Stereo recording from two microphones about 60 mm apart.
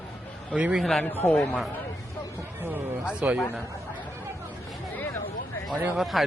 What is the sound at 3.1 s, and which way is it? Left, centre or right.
Speech, centre.